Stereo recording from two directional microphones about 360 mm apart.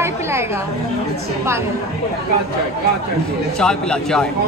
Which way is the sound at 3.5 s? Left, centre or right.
Centre.